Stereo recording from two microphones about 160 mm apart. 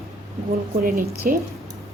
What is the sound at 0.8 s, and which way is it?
Speech, 65° right (ahead or behind).